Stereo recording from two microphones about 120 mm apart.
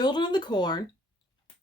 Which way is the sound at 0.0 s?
40° left (ahead or behind).